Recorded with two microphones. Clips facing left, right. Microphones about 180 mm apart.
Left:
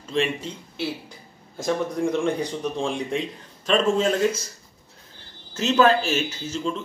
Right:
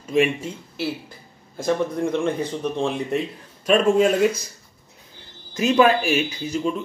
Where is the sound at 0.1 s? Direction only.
10° right (ahead or behind).